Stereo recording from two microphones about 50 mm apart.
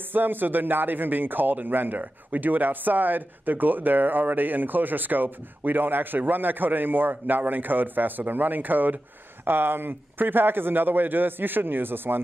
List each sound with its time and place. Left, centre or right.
0.1 s a man's voice: right